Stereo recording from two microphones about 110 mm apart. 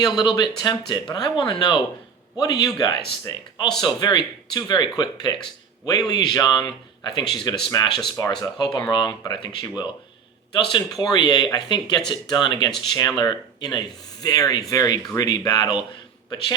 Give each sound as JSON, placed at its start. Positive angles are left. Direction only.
{"t": 0.3, "sound": "speech", "side_deg": 40}